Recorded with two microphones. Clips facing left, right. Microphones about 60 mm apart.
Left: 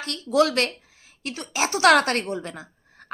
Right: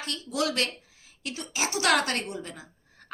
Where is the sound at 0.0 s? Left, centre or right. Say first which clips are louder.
Left 9 dB; left.